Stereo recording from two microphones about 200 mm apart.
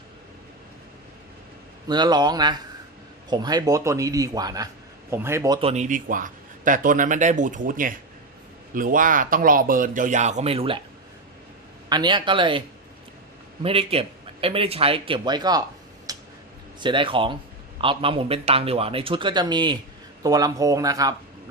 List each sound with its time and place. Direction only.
1.9 s a man's voice: 20° right (ahead or behind)
5.5 s speech: 30° right (ahead or behind)
11.9 s a man's voice: 20° right (ahead or behind)
16.1 s tick-tock: 20° right (ahead or behind)
16.8 s a man's voice: 25° right (ahead or behind)